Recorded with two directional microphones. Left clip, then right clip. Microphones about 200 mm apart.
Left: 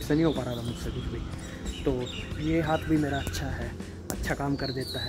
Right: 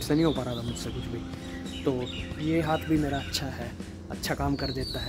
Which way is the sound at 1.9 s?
10° right (ahead or behind).